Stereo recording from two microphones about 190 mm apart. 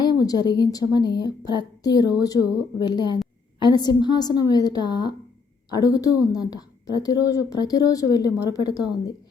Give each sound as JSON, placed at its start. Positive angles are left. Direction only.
{"t": 0.0, "sound": "a woman's voice", "side_deg": 20}